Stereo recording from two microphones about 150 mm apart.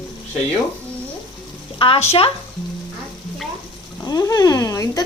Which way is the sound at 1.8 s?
40° left (ahead or behind).